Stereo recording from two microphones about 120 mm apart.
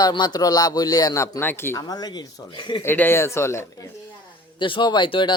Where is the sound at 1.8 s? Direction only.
35° left (ahead or behind).